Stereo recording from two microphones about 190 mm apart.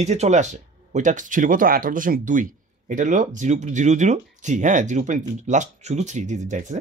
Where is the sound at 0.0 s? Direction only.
35° right (ahead or behind).